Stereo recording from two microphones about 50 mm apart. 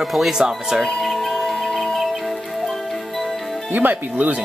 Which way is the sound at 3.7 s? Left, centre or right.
Right.